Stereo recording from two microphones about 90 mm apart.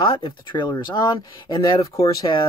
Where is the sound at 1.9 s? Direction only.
40° left (ahead or behind).